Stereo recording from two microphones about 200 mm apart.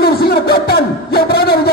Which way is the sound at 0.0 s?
50° left (ahead or behind).